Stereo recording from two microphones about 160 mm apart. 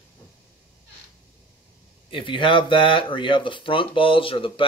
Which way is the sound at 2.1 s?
30° left (ahead or behind).